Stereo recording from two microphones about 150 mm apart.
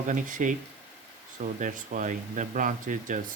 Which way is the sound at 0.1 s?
60° right (ahead or behind).